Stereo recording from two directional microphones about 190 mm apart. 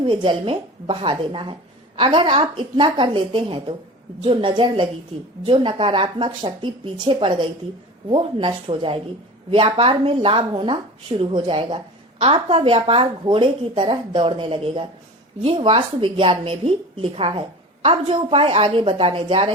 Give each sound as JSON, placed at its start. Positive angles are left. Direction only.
{"t": 0.0, "sound": "a woman's voice", "side_deg": -25}